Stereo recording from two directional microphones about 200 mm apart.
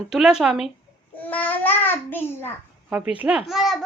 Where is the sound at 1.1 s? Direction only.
10° left (ahead or behind).